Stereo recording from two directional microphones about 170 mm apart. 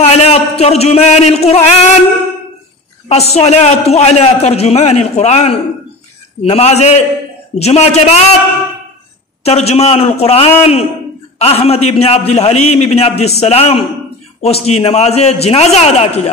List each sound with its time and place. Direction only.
0.0 s a man's voice: 40° left (ahead or behind)
3.1 s a man's voice: 40° left (ahead or behind)
9.4 s a man's voice: 40° left (ahead or behind)